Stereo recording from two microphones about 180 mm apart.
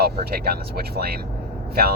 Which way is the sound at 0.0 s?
60° right (ahead or behind).